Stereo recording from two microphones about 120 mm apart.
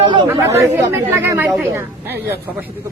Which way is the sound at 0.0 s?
40° right (ahead or behind).